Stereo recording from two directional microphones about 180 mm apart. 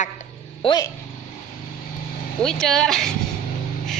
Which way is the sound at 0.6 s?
25° left (ahead or behind).